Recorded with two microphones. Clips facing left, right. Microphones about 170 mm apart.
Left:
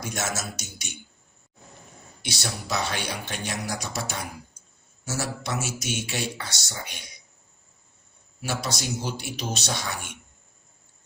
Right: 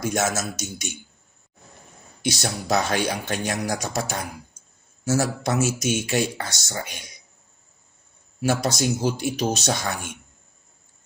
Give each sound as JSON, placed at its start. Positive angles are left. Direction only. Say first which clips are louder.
{"t": 0.0, "sound": "speech", "louder": "right 7 dB", "side_deg": -50}
{"t": 2.2, "sound": "speech", "louder": "right 7 dB", "side_deg": -45}
{"t": 8.4, "sound": "speech", "louder": "right 8 dB", "side_deg": -50}